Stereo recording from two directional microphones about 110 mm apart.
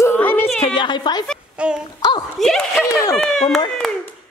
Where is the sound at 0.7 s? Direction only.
45° left (ahead or behind).